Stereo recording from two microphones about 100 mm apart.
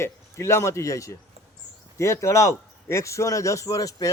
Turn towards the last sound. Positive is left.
turn(degrees=35)  # may be behind; listen again after turning